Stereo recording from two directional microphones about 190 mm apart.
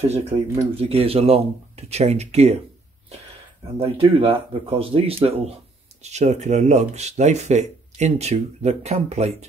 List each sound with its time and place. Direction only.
0.0 s speech: 35° right (ahead or behind)
3.8 s speech: 30° right (ahead or behind)